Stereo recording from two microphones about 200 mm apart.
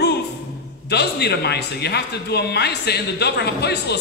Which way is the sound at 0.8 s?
55° left (ahead or behind).